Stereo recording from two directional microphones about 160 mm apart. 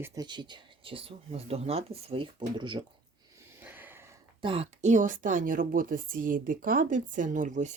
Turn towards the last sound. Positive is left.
turn(degrees=-50)  # may be behind; listen again after turning